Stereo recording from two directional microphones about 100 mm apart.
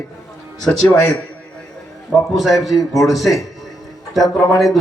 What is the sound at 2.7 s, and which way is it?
Speech, 35° left (ahead or behind).